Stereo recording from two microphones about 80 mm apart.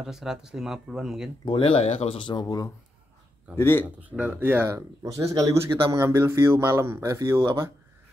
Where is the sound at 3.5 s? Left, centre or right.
Left.